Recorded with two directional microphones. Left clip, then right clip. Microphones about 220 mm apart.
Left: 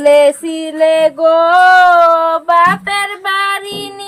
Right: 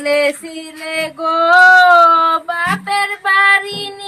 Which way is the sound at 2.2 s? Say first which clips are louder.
Left 4 dB; 40° left (ahead or behind).